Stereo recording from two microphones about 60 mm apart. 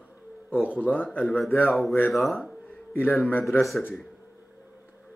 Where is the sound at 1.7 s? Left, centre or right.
Centre.